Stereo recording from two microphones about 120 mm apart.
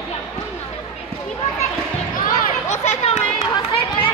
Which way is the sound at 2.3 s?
70° left (ahead or behind).